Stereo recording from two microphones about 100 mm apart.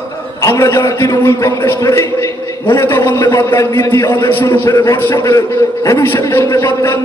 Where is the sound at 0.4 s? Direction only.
30° left (ahead or behind).